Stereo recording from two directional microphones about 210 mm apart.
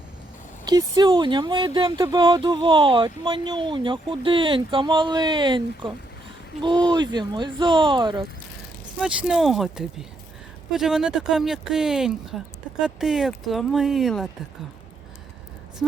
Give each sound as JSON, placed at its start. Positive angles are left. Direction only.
{"t": 0.6, "sound": "speech", "side_deg": -20}
{"t": 9.0, "sound": "speech", "side_deg": -5}